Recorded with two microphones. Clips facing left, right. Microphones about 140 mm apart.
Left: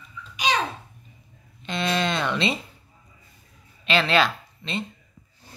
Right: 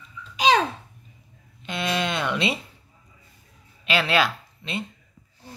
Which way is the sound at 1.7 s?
10° right (ahead or behind).